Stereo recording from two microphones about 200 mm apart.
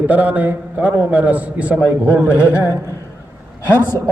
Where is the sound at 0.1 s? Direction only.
10° right (ahead or behind).